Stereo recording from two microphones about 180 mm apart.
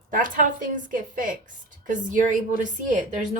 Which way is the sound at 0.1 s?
50° right (ahead or behind).